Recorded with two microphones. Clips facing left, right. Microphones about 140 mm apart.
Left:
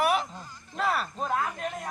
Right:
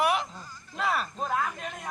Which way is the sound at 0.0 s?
Centre (ahead or behind).